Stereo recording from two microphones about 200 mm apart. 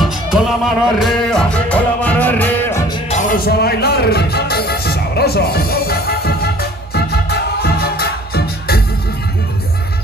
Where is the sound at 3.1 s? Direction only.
40° left (ahead or behind).